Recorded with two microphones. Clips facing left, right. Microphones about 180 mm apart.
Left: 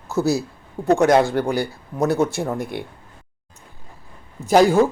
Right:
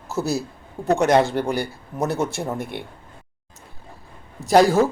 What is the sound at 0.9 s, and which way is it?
Speech, centre (ahead or behind).